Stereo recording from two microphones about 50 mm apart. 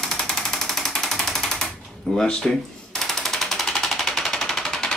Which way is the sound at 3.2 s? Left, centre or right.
Centre.